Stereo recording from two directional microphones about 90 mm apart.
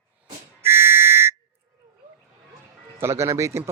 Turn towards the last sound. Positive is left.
turn(degrees=-30)  # may be behind; listen again after turning